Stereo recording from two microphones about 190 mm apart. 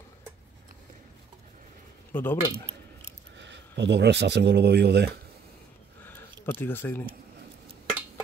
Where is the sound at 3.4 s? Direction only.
70° right (ahead or behind).